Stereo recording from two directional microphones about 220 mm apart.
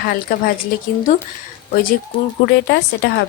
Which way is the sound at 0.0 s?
40° left (ahead or behind).